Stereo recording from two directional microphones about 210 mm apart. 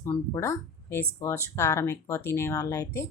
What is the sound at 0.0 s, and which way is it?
Speech, 15° left (ahead or behind).